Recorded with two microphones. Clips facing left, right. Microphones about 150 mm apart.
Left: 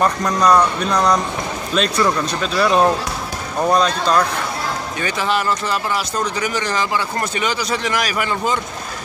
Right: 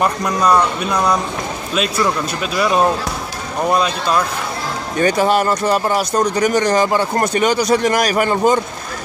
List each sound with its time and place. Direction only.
0.0 s speech: 5° right (ahead or behind)
4.9 s speech: 45° right (ahead or behind)